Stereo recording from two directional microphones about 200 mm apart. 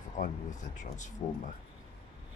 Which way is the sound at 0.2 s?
40° left (ahead or behind).